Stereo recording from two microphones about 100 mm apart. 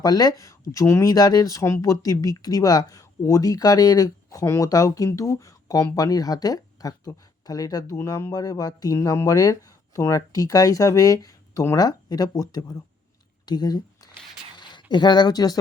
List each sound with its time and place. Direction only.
0.0 s speech: 40° left (ahead or behind)
13.4 s a sound: 45° left (ahead or behind)
14.6 s speech: 50° left (ahead or behind)